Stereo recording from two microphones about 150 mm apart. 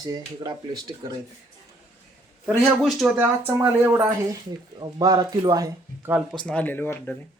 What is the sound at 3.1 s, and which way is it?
Speech, 15° right (ahead or behind).